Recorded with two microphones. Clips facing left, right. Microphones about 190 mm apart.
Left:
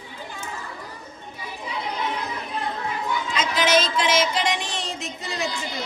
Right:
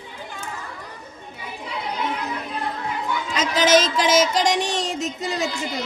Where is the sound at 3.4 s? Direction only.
40° right (ahead or behind).